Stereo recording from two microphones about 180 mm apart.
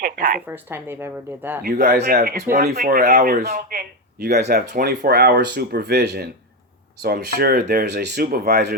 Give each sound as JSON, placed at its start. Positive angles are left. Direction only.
{"t": 0.0, "sound": "a woman's voice", "side_deg": -50}
{"t": 0.4, "sound": "a woman's voice", "side_deg": -10}
{"t": 1.6, "sound": "speech", "side_deg": -60}